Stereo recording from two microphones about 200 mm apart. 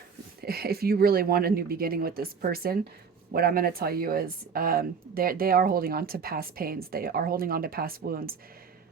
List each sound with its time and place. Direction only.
0.4 s speech: 50° right (ahead or behind)